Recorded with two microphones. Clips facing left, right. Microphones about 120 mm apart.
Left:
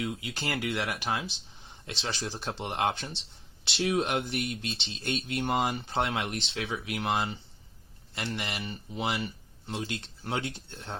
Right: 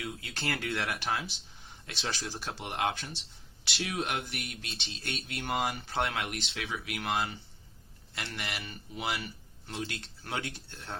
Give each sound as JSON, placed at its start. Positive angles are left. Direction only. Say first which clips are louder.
{"t": 0.0, "sound": "speech", "louder": "left 4 dB", "side_deg": 15}
{"t": 1.9, "sound": "speech", "louder": "left 2 dB", "side_deg": 25}